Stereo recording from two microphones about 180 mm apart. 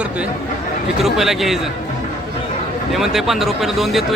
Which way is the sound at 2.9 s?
Centre (ahead or behind).